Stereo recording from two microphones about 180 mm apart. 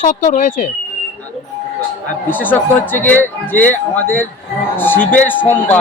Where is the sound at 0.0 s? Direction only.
40° left (ahead or behind).